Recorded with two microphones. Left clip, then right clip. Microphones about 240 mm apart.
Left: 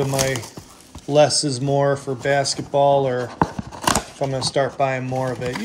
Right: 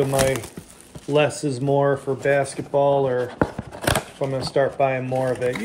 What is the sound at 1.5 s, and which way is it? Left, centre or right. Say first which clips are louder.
Speech: even; centre.